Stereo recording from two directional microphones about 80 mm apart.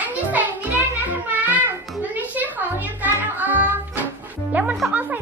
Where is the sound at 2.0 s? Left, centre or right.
Right.